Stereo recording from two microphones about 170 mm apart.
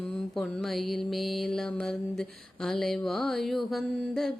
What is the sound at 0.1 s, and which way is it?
Mantra, centre (ahead or behind).